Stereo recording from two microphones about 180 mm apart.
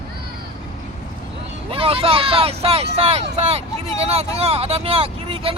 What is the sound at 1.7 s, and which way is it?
Speech, 30° right (ahead or behind).